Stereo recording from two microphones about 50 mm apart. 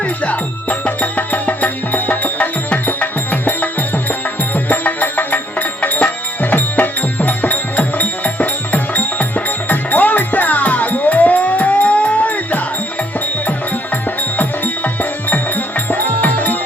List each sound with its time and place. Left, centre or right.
0.0 s music: left
15.3 s music: left